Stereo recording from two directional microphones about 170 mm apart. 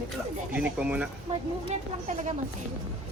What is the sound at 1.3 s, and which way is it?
Speech, 40° right (ahead or behind).